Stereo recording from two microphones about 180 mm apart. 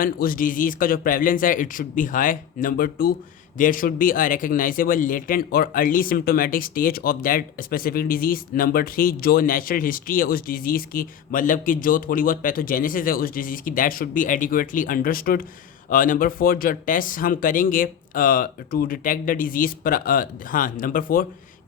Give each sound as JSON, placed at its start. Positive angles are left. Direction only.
{"t": 0.0, "sound": "a man's voice", "side_deg": 50}